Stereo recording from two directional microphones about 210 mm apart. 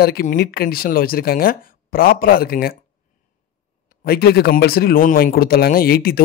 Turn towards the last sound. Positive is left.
turn(degrees=45)  # may be behind; listen again after turning